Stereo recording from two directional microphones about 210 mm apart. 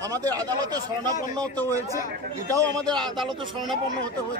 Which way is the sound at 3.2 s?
Centre (ahead or behind).